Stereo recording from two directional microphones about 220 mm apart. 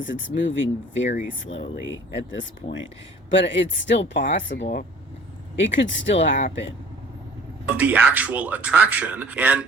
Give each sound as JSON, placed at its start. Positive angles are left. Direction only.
{"t": 0.0, "sound": "speech", "side_deg": 60}
{"t": 7.8, "sound": "speech", "side_deg": -5}